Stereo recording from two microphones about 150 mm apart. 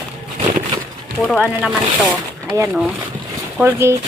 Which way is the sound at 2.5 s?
10° right (ahead or behind).